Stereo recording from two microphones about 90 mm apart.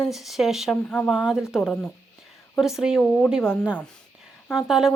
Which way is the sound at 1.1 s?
10° right (ahead or behind).